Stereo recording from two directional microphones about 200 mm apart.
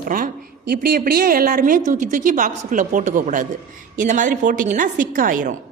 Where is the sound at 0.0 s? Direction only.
45° right (ahead or behind).